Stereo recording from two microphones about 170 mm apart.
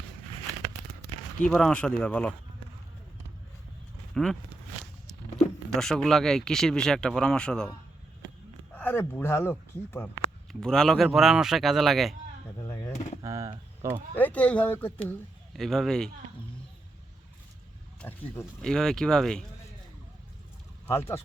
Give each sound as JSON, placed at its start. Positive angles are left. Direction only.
{"t": 1.5, "sound": "speech", "side_deg": 5}
{"t": 4.1, "sound": "speech", "side_deg": 5}
{"t": 5.7, "sound": "speech", "side_deg": 0}
{"t": 8.7, "sound": "speech", "side_deg": 10}
{"t": 12.6, "sound": "a sound", "side_deg": 20}
{"t": 13.2, "sound": "speech", "side_deg": -20}
{"t": 14.2, "sound": "speech", "side_deg": 10}
{"t": 18.0, "sound": "speech", "side_deg": 10}
{"t": 20.8, "sound": "speech", "side_deg": 15}